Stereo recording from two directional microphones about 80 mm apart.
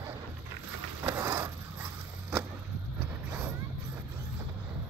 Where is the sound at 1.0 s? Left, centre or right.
Right.